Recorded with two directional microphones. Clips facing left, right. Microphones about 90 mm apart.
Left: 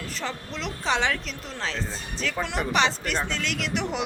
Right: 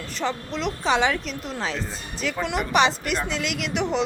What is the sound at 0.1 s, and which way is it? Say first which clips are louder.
Speech: right 9 dB; centre (ahead or behind).